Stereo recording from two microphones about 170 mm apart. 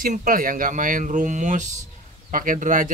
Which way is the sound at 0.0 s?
55° right (ahead or behind).